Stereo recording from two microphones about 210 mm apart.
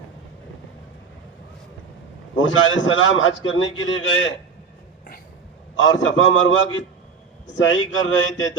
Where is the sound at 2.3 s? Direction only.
70° left (ahead or behind).